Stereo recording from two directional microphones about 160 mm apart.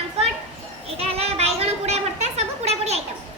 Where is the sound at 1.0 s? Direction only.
40° right (ahead or behind).